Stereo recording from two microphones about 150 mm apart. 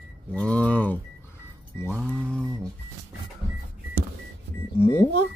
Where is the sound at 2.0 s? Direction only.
10° right (ahead or behind).